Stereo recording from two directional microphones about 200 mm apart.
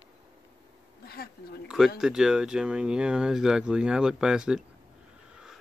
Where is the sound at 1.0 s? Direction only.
50° left (ahead or behind).